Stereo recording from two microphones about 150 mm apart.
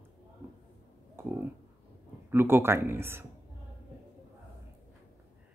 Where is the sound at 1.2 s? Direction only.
15° right (ahead or behind).